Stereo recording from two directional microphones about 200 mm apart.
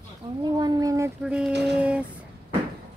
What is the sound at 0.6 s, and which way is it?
Speech, 20° right (ahead or behind).